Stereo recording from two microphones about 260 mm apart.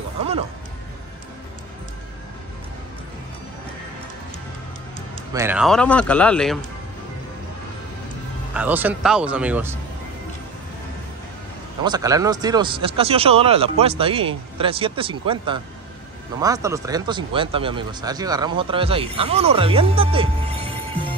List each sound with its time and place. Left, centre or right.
5.3 s a man's voice: centre
8.5 s a man's voice: centre
11.8 s speech: centre